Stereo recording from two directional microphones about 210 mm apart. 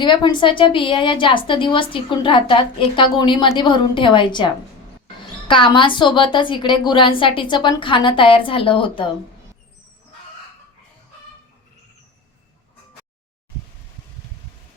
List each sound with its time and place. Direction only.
0.0 s speech: 20° left (ahead or behind)